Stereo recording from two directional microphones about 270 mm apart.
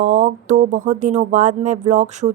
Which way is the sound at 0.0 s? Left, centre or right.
Right.